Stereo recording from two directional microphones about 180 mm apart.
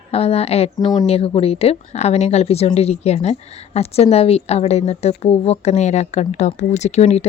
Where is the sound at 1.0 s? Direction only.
35° left (ahead or behind).